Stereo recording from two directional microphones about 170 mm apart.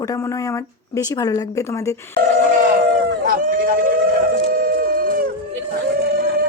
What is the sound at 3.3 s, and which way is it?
Howl, 55° right (ahead or behind).